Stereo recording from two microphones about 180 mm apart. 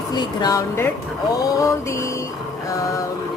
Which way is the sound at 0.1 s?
25° left (ahead or behind).